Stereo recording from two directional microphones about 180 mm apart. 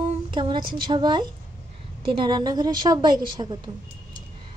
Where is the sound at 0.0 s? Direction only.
25° right (ahead or behind).